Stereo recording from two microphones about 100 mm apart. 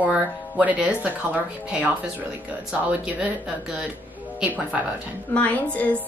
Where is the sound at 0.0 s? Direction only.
15° right (ahead or behind).